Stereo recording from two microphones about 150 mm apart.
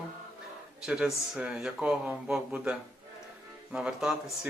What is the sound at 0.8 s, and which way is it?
Speech, 5° right (ahead or behind).